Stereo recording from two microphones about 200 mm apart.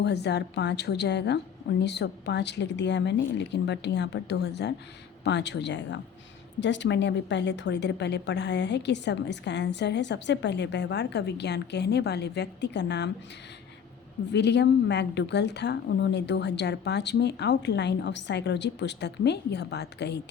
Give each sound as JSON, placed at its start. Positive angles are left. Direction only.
{"t": 0.0, "sound": "a woman's voice", "side_deg": 60}
{"t": 14.3, "sound": "a woman's voice", "side_deg": 60}